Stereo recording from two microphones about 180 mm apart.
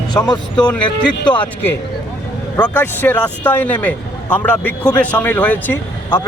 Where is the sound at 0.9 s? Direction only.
25° left (ahead or behind).